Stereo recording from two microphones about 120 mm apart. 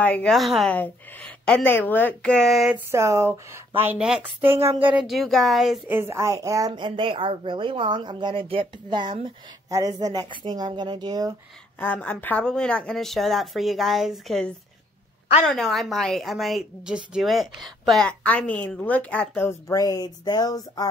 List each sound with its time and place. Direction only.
0.0 s speech: 10° left (ahead or behind)
0.3 s a woman's voice: centre (ahead or behind)
2.9 s speech: 25° right (ahead or behind)
4.0 s a woman's voice: 5° right (ahead or behind)
4.4 s speech: 20° right (ahead or behind)
5.0 s a woman's voice: centre (ahead or behind)
5.9 s a woman's voice: 20° right (ahead or behind); by 9.1 s 45° right (ahead or behind)
9.7 s a woman's voice: 30° right (ahead or behind)
11.8 s a woman's voice: 15° left (ahead or behind)
19.7 s speech: 30° left (ahead or behind)